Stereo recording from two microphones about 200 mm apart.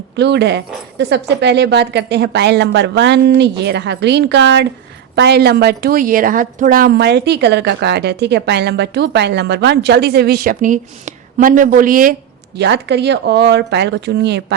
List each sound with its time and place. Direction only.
0.2 s a woman's voice: 60° right (ahead or behind); by 12.1 s 45° right (ahead or behind)
12.5 s a woman's voice: 60° right (ahead or behind)